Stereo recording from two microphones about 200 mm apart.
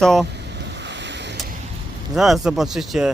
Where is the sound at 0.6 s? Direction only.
60° right (ahead or behind).